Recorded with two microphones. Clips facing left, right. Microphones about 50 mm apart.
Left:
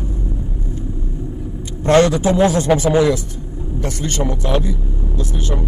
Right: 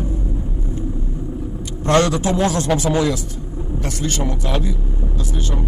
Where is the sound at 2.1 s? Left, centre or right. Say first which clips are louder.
Left 4 dB; centre.